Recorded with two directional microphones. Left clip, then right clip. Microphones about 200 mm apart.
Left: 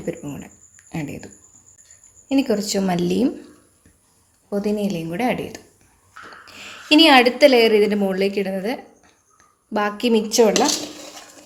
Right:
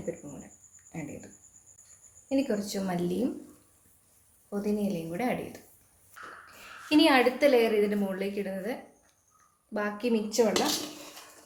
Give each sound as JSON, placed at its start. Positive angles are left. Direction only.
{"t": 0.9, "sound": "speech", "side_deg": 50}
{"t": 2.3, "sound": "a woman's voice", "side_deg": 50}
{"t": 4.4, "sound": "a woman's voice", "side_deg": 50}